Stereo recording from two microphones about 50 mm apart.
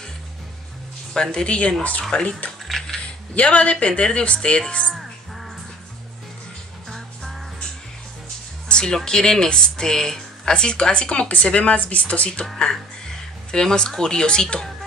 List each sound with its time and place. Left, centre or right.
1.1 s speech: centre
2.7 s mechanisms: centre
3.3 s speech: left
4.9 s crow: centre
8.6 s speech: centre
13.5 s speech: centre